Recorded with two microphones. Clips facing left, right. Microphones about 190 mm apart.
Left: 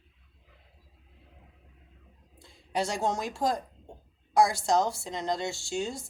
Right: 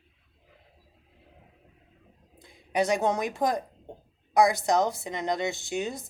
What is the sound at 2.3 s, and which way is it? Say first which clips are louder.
A woman's voice: right 4 dB; 20° right (ahead or behind).